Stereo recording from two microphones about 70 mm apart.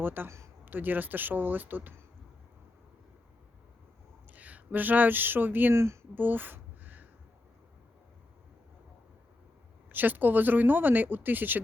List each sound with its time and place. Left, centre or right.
0.0 s speech: right
0.3 s speech: right
0.6 s speech: right
4.3 s speech: right
5.7 s speech: right
6.1 s a sound: right
9.9 s speech: right